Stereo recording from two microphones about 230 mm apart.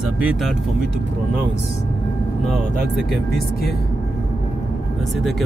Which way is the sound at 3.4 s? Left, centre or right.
Left.